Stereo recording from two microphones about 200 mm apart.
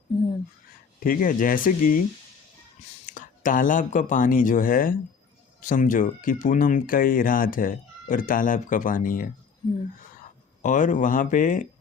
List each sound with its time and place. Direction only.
0.9 s speech: 45° left (ahead or behind)
3.1 s speech: 40° left (ahead or behind)